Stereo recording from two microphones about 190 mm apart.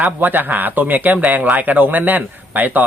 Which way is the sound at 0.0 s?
10° right (ahead or behind).